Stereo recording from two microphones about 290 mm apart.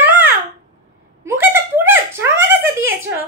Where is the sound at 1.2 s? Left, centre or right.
Centre.